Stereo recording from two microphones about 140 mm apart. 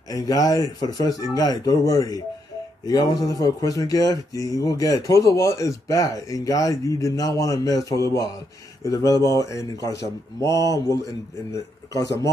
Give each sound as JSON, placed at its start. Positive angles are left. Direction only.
{"t": 0.1, "sound": "speech", "side_deg": 25}